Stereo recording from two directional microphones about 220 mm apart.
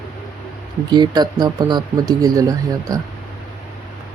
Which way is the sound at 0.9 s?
20° right (ahead or behind).